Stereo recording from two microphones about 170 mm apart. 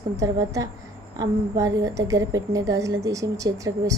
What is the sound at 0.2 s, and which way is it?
A woman's voice, 20° right (ahead or behind).